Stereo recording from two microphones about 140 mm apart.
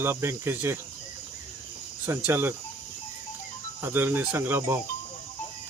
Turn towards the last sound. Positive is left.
turn(degrees=-15)  # may be behind; listen again after turning